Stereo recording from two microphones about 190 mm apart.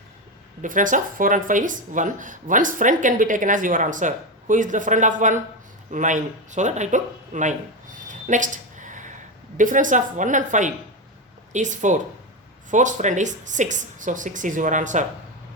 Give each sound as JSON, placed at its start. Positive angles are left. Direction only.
{"t": 0.6, "sound": "speech", "side_deg": -45}
{"t": 8.0, "sound": "a sound", "side_deg": -40}
{"t": 9.6, "sound": "speech", "side_deg": -45}